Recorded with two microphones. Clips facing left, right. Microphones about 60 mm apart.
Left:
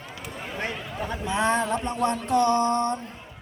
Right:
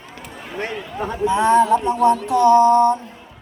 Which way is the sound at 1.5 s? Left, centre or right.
Centre.